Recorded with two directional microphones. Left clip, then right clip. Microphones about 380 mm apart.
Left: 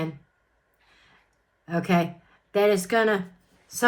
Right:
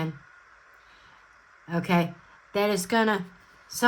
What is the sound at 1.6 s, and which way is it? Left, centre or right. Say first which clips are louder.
A woman's voice: left 2 dB; right.